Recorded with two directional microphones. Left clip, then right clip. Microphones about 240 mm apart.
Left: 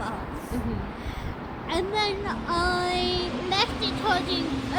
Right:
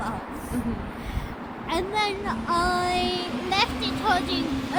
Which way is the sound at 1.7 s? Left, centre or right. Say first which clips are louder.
Right 1 dB; centre.